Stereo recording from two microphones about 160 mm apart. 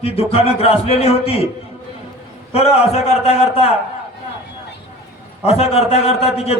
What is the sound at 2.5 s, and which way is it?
A man's voice, 40° left (ahead or behind).